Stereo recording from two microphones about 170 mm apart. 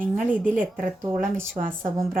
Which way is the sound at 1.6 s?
45° right (ahead or behind).